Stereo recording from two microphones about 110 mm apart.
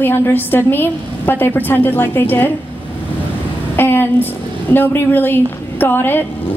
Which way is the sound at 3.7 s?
20° left (ahead or behind).